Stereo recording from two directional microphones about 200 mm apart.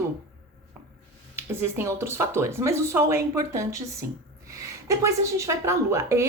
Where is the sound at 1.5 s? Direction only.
10° right (ahead or behind).